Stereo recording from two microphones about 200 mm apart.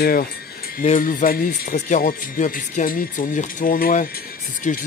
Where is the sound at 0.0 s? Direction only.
45° left (ahead or behind).